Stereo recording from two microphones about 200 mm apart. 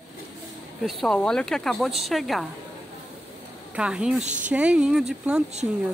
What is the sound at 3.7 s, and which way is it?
Speech, 5° right (ahead or behind).